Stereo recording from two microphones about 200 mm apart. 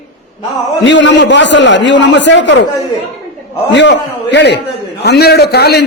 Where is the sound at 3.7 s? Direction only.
60° left (ahead or behind).